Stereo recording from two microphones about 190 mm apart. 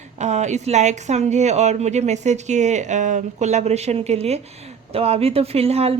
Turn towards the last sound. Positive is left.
turn(degrees=-30)  # may be behind; listen again after turning